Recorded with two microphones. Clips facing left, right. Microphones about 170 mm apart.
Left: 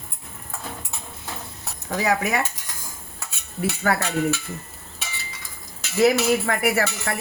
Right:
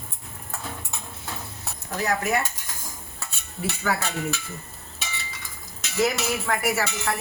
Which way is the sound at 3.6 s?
60° left (ahead or behind).